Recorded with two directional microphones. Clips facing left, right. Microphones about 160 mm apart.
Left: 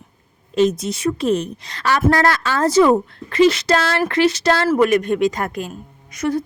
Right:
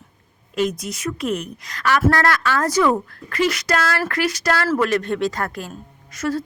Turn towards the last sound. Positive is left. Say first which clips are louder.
# left 3 dB
turn(degrees=20)  # may be behind; listen again after turning